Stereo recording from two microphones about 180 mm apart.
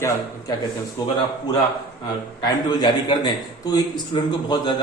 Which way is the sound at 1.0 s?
20° left (ahead or behind).